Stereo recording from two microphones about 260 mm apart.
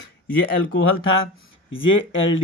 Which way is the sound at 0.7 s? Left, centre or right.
Left.